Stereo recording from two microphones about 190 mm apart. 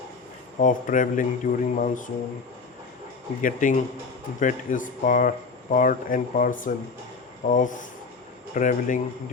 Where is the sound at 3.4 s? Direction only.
45° left (ahead or behind).